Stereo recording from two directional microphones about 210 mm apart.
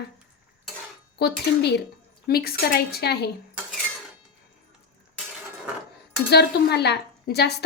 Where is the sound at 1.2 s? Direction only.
50° left (ahead or behind).